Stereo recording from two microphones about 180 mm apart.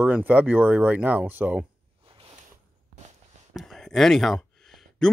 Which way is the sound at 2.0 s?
30° right (ahead or behind).